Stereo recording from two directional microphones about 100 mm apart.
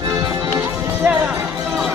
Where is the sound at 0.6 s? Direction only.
20° right (ahead or behind).